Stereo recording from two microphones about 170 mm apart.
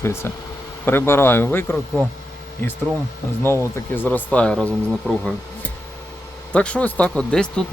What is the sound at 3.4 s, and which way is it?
Speech, 15° left (ahead or behind).